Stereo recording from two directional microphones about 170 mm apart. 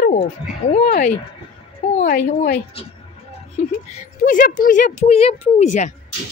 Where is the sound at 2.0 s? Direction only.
55° left (ahead or behind).